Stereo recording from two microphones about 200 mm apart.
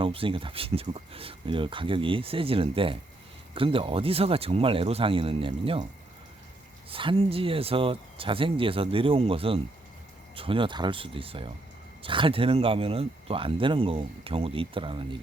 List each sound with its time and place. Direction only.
0.0 s speech: 25° right (ahead or behind)
6.9 s speech: 25° right (ahead or behind)